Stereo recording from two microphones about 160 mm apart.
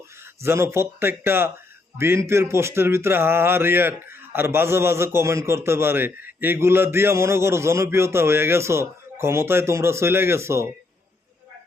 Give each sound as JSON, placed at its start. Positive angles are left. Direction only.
{"t": 0.4, "sound": "speech", "side_deg": -15}